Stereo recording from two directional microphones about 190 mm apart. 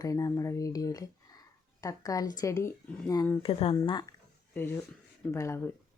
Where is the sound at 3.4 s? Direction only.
30° left (ahead or behind).